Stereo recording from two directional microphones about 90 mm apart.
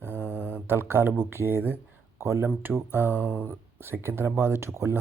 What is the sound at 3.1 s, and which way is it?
Mantra, 25° left (ahead or behind).